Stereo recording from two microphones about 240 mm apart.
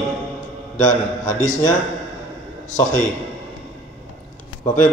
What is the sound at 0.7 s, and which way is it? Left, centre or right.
Speech, left.